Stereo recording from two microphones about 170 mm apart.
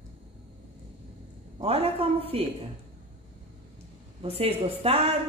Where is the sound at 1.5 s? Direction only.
35° right (ahead or behind).